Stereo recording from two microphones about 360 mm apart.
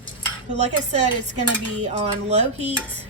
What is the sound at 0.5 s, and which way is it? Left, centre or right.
A woman's voice, centre.